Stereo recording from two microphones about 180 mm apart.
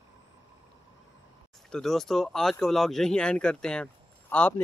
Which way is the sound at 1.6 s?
5° left (ahead or behind).